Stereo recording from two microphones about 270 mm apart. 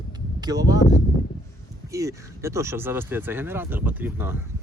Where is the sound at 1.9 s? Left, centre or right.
Centre.